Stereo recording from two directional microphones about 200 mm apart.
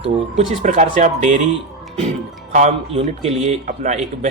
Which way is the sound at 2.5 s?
35° right (ahead or behind).